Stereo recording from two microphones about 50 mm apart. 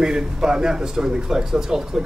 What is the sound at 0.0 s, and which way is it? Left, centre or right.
Speech, centre.